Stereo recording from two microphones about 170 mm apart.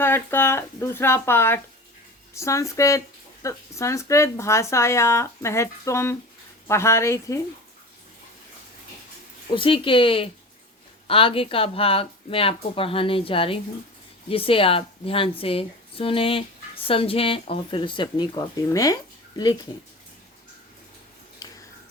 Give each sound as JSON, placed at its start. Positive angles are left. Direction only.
{"t": 0.0, "sound": "speech", "side_deg": 15}
{"t": 9.6, "sound": "a woman's voice", "side_deg": 30}
{"t": 21.4, "sound": "a sound", "side_deg": 20}